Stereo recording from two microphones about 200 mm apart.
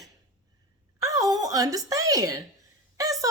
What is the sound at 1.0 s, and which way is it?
Speech, 15° right (ahead or behind).